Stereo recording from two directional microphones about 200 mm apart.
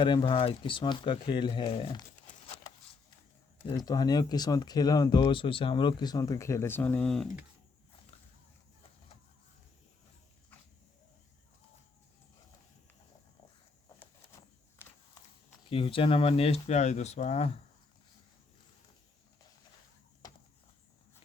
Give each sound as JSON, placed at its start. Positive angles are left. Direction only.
{"t": 0.0, "sound": "speech", "side_deg": 25}
{"t": 3.7, "sound": "speech", "side_deg": 20}
{"t": 15.7, "sound": "speech", "side_deg": 25}